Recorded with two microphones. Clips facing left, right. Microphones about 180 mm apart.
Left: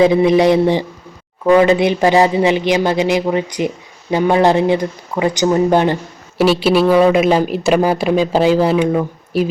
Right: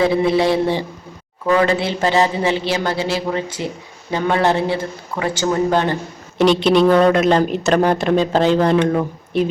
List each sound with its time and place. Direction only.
0.0 s speech: 20° left (ahead or behind)
6.3 s speech: 5° left (ahead or behind)